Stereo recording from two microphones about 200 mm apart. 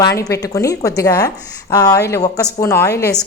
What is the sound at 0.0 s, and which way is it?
A woman's voice, 15° left (ahead or behind).